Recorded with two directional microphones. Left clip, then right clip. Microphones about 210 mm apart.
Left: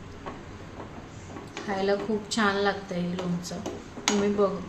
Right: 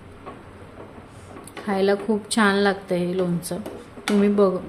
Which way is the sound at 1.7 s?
45° right (ahead or behind).